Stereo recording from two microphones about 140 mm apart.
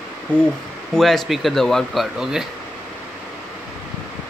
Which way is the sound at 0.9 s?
Centre (ahead or behind).